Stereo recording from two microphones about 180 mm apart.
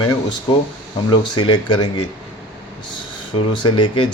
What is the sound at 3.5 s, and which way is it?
Speech, 25° left (ahead or behind).